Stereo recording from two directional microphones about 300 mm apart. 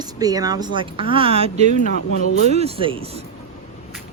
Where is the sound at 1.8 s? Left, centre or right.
Left.